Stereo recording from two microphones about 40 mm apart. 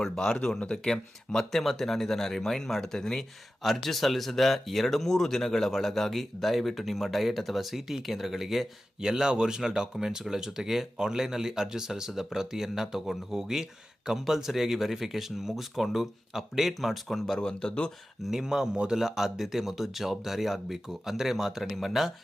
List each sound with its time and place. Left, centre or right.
0.0 s speech: centre
9.0 s speech: centre
17.3 s speech: left
18.3 s speech: centre